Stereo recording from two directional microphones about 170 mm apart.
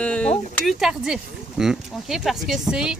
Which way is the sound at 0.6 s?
Centre (ahead or behind).